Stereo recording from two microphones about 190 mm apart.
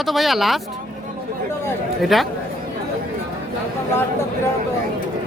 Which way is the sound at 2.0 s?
Centre (ahead or behind).